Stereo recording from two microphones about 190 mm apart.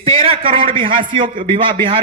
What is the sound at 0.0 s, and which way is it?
A man's voice, 30° right (ahead or behind).